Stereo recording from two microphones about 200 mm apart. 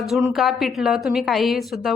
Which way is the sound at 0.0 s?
Centre (ahead or behind).